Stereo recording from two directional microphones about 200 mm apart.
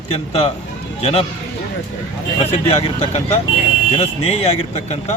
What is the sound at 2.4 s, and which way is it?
A man's voice, 30° left (ahead or behind).